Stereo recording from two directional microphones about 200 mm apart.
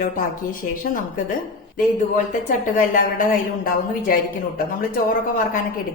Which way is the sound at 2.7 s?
40° left (ahead or behind).